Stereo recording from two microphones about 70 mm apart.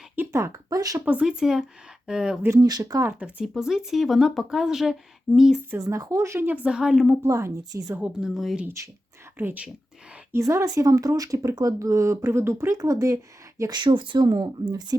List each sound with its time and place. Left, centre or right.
0.3 s speech: right
1.0 s speech: centre
2.6 s speech: right
3.1 s speech: centre
3.4 s speech: centre
5.8 s speech: right
6.7 s speech: centre
7.2 s speech: right
8.0 s speech: centre
9.4 s speech: right
10.3 s speech: right
13.7 s speech: right